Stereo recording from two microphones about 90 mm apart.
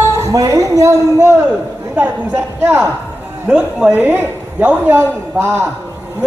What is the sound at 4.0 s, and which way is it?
A woman's voice, 20° right (ahead or behind).